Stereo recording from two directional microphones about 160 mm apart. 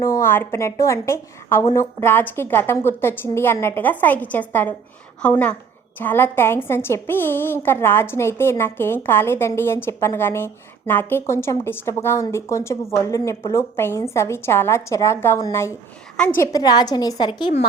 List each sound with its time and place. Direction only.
0.0 s a woman's voice: 15° left (ahead or behind)